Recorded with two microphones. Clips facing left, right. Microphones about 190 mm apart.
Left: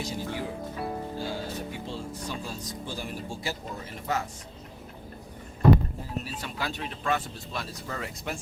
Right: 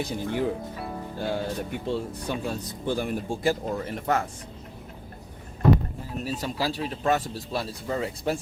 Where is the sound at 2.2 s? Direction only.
60° right (ahead or behind).